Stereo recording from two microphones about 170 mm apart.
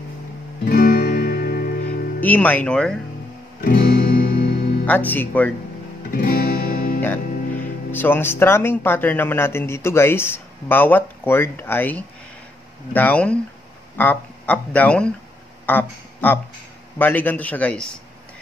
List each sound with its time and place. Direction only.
0.7 s music: 55° left (ahead or behind)
2.1 s speech: 10° left (ahead or behind)
3.6 s music: 60° left (ahead or behind)
4.8 s speech: 10° left (ahead or behind)
6.1 s music: 55° left (ahead or behind)
7.0 s speech: 10° left (ahead or behind)